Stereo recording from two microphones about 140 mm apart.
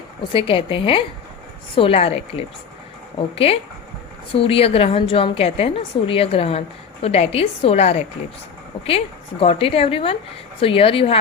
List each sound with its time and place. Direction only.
0.3 s a woman's voice: 40° left (ahead or behind)